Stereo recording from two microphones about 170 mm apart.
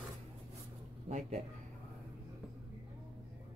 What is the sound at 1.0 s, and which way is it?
Speech, 45° right (ahead or behind).